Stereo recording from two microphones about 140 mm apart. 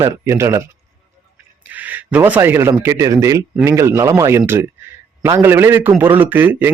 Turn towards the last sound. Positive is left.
turn(degrees=-15)  # may be behind; listen again after turning